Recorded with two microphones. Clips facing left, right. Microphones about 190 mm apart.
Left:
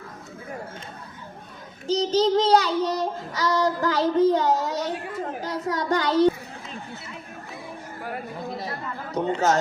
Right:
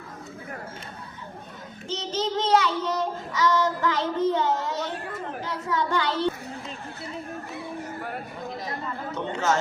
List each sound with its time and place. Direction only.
1.9 s child singing: 35° left (ahead or behind)
9.1 s speech: 40° left (ahead or behind)